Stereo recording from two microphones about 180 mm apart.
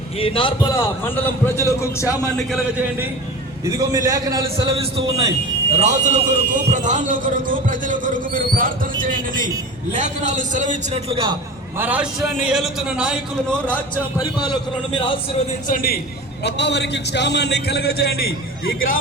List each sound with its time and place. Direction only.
0.2 s a man's voice: 30° left (ahead or behind)
1.0 s a man's voice: 10° left (ahead or behind)
3.7 s a man's voice: 20° right (ahead or behind)
5.8 s a man's voice: 40° right (ahead or behind)
11.8 s a man's voice: 10° right (ahead or behind)
13.5 s a man's voice: 5° left (ahead or behind)
14.9 s a man's voice: 30° left (ahead or behind)
15.6 s a man's voice: 50° left (ahead or behind)
16.4 s a man's voice: 75° left (ahead or behind)
18.6 s a man's voice: 55° left (ahead or behind)